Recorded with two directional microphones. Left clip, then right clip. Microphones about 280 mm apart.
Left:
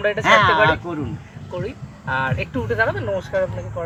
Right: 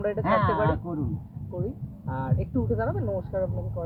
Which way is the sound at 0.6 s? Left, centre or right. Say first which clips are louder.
Left 10 dB; left.